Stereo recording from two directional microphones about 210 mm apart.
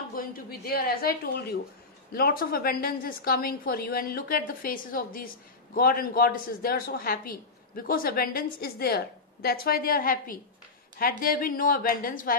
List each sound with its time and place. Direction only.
0.1 s speech: 45° left (ahead or behind)